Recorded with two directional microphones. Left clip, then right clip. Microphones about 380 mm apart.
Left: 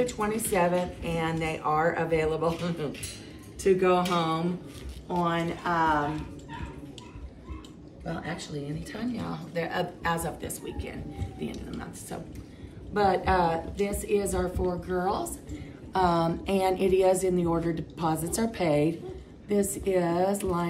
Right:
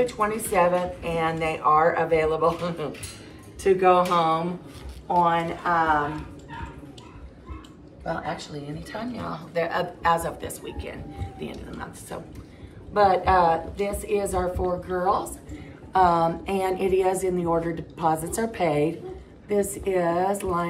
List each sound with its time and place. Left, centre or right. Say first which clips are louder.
0.0 s speech: right 4 dB; centre
8.0 s speech: right 6 dB; centre
12.9 s a woman's voice: right 5 dB; centre